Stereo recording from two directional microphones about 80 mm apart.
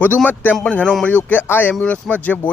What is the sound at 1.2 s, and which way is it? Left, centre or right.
Speech, left.